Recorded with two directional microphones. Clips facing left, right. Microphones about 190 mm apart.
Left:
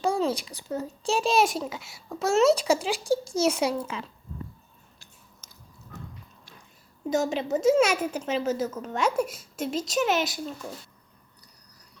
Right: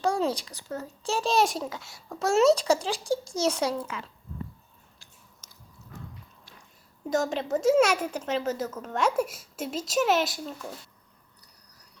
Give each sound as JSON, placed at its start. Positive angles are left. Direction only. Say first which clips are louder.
{"t": 0.0, "sound": "a child's voice", "louder": "left 1 dB", "side_deg": 5}
{"t": 3.8, "sound": "speech", "louder": "left 2 dB", "side_deg": 20}
{"t": 7.1, "sound": "a woman's voice", "louder": "left 1 dB", "side_deg": 5}